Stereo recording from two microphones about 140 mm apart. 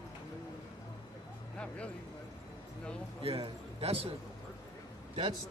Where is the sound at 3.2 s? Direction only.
40° right (ahead or behind).